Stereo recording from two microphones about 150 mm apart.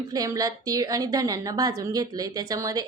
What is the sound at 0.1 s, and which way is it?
A woman's voice, 25° right (ahead or behind).